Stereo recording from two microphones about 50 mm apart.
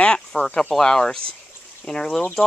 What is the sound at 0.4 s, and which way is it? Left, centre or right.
Speech, left.